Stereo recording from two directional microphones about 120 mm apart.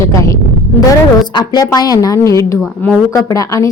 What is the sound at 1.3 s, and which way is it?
A woman's voice, 35° left (ahead or behind).